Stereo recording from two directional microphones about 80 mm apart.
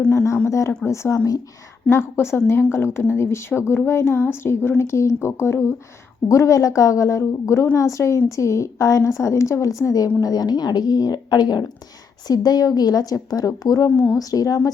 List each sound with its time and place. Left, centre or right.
0.4 s a woman's voice: left
1.9 s a woman's voice: left